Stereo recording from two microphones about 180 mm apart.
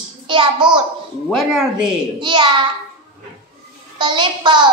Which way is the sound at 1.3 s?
Centre (ahead or behind).